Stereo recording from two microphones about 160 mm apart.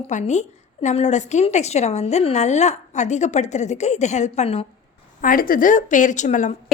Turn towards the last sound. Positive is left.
turn(degrees=50)  # may be behind; listen again after turning